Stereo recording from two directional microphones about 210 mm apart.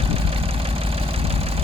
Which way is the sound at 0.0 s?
25° right (ahead or behind).